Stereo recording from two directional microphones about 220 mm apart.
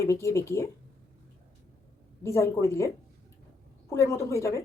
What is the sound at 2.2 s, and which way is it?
Speech, 15° left (ahead or behind).